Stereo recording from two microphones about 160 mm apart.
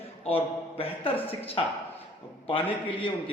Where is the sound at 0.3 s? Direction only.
35° left (ahead or behind).